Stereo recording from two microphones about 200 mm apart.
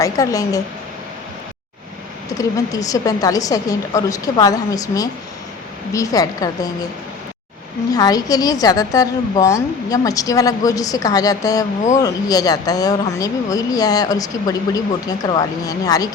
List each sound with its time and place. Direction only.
0.0 s a woman's voice: 15° left (ahead or behind)
2.4 s a woman's voice: 15° left (ahead or behind)
7.9 s a woman's voice: 20° left (ahead or behind)